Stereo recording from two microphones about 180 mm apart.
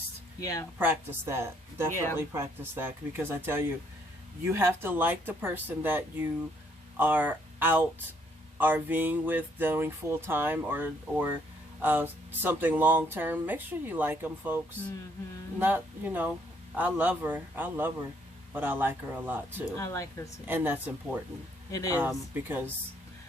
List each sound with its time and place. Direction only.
0.8 s speech: 10° right (ahead or behind)
19.7 s speech: 15° left (ahead or behind)
20.5 s speech: 10° right (ahead or behind)
21.7 s speech: 20° left (ahead or behind)
21.9 s speech: 10° right (ahead or behind)